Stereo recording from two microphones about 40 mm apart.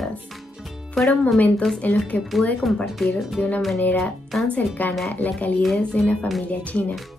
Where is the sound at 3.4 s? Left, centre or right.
Left.